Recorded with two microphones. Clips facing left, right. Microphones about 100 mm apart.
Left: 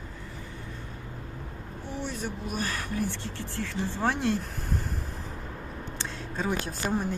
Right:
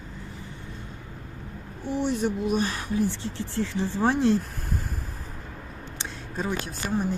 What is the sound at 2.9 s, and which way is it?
Speech, 55° left (ahead or behind).